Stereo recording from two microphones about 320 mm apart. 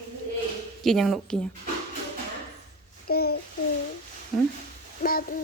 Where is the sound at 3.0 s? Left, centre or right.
Left.